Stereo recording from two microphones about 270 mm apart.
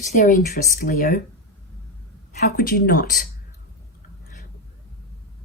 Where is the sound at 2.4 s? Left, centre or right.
Left.